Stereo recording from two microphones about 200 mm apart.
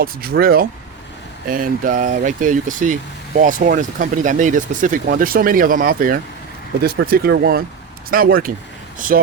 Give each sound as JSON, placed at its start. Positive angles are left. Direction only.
{"t": 0.0, "sound": "speech", "side_deg": -50}